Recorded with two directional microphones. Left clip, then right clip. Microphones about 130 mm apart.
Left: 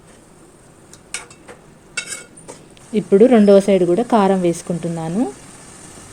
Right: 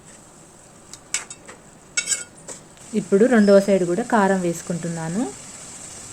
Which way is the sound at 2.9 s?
25° left (ahead or behind).